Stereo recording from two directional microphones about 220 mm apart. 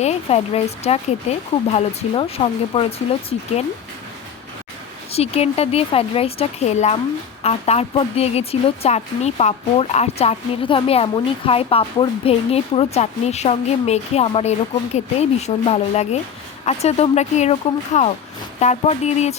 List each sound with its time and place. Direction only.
0.0 s speech: 30° left (ahead or behind)
5.1 s speech: 30° left (ahead or behind)